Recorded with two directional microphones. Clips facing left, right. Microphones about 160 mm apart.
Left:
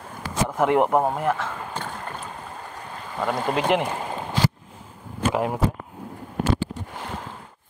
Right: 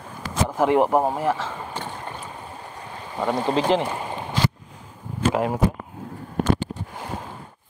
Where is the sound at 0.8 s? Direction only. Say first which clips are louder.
Right 1 dB; 5° right (ahead or behind).